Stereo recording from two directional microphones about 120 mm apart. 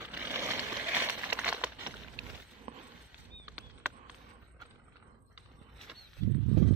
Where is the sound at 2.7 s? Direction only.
50° right (ahead or behind).